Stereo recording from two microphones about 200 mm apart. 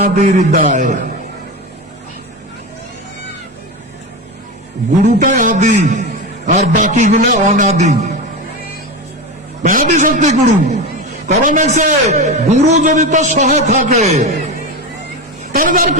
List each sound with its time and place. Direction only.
0.0 s a man's voice: 45° right (ahead or behind)
5.0 s a man's voice: 40° right (ahead or behind)
9.6 s a man's voice: 40° right (ahead or behind)
15.5 s a woman's voice: 45° right (ahead or behind)